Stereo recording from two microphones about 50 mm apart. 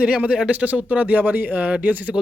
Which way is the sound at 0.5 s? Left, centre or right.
Right.